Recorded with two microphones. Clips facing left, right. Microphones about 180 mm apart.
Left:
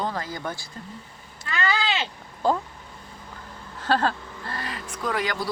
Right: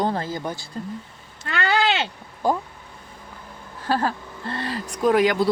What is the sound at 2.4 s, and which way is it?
Speech, 15° right (ahead or behind).